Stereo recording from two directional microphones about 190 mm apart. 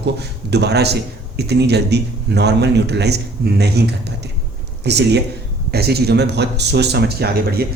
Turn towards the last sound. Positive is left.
turn(degrees=-55)  # may be behind; listen again after turning